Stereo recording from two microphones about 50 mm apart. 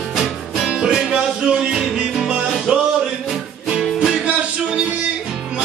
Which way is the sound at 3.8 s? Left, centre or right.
Centre.